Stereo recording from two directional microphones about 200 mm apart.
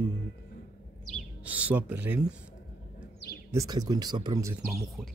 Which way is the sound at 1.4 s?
5° right (ahead or behind).